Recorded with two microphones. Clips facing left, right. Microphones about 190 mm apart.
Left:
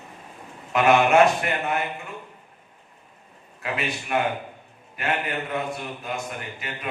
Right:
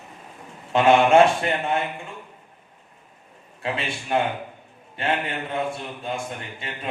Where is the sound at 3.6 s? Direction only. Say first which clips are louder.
Right 1 dB; 30° right (ahead or behind).